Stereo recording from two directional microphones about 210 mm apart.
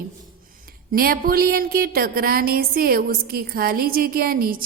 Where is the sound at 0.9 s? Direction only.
45° right (ahead or behind).